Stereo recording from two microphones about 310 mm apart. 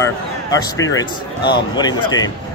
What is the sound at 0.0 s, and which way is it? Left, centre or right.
Speech, centre.